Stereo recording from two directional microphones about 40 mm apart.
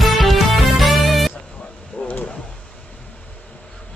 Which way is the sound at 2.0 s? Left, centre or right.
Left.